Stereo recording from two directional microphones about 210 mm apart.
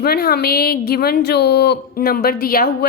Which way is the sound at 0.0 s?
45° left (ahead or behind).